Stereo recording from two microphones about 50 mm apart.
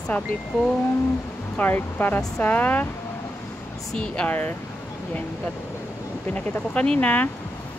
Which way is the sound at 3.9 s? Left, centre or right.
Centre.